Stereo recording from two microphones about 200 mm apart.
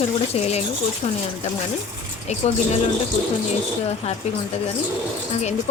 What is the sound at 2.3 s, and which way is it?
Speech, 35° left (ahead or behind).